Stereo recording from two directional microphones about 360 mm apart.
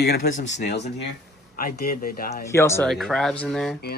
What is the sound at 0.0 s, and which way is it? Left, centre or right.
Speech, left.